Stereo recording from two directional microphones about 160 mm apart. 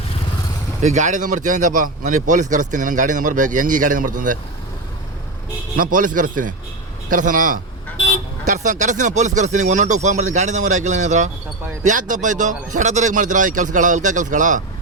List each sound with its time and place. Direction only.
0.8 s a man's voice: 50° right (ahead or behind)
5.7 s a man's voice: 55° right (ahead or behind)